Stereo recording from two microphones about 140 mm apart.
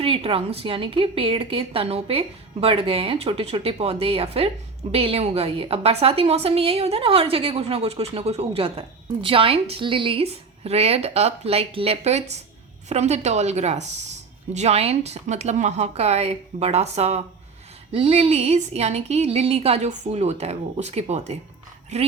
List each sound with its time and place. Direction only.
0.0 s a woman's voice: 40° right (ahead or behind)